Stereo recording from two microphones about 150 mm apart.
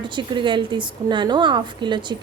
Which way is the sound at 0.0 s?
30° right (ahead or behind).